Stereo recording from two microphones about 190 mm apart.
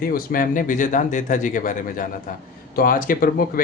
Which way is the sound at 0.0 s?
50° left (ahead or behind).